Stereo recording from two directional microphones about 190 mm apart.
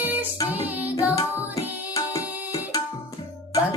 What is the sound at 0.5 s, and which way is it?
Music, 10° right (ahead or behind).